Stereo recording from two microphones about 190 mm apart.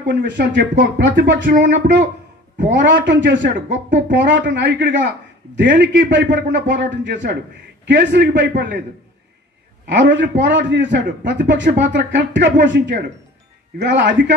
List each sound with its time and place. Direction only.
0.0 s speech: 65° right (ahead or behind)
9.8 s speech: 70° right (ahead or behind)